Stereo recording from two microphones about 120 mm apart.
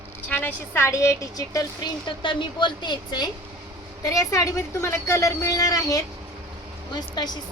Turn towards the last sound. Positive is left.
turn(degrees=35)  # may be behind; listen again after turning